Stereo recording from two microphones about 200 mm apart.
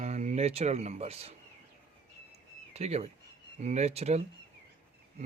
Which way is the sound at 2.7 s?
30° right (ahead or behind).